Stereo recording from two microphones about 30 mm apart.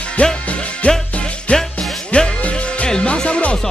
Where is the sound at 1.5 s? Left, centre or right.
Left.